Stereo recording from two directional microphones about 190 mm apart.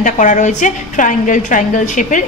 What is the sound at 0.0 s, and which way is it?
A woman's voice, 40° left (ahead or behind).